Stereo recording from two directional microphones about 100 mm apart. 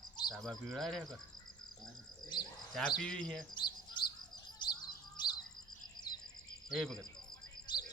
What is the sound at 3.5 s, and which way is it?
Bird, 50° left (ahead or behind).